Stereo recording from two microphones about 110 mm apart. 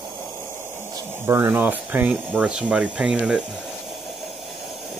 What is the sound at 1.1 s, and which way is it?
Speech, 20° right (ahead or behind).